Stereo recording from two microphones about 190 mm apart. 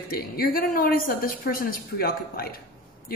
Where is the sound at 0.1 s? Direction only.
50° left (ahead or behind).